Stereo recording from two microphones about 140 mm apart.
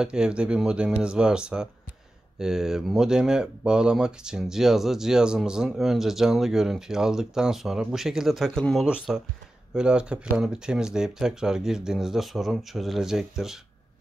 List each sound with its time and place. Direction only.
0.0 s speech: 5° right (ahead or behind)